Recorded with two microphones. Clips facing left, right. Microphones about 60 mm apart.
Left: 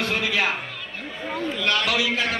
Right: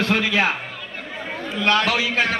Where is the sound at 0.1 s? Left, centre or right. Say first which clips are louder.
Right 4 dB; right.